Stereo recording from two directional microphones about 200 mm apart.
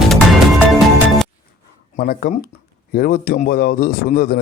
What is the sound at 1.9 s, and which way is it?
A man's voice, 50° left (ahead or behind).